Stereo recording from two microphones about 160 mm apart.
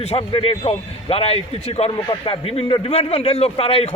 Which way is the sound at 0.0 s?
40° left (ahead or behind).